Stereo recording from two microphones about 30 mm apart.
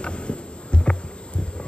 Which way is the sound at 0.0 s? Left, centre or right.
Left.